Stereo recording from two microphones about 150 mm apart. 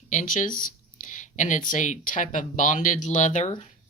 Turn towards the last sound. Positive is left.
turn(degrees=55)  # may be behind; listen again after turning